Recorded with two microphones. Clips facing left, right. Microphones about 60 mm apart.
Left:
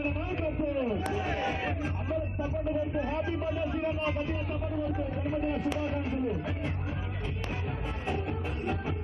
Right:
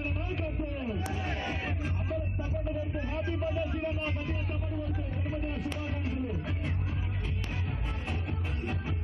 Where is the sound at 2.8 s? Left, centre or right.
Centre.